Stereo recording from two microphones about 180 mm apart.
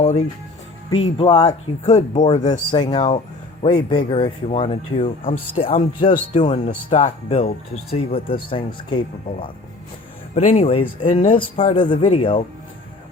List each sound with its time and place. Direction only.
1.0 s speech: 35° left (ahead or behind)
2.4 s speech: 20° left (ahead or behind)
10.3 s speech: 40° left (ahead or behind)